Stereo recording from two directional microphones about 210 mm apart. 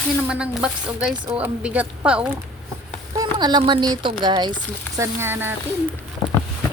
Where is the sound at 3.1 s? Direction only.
20° right (ahead or behind).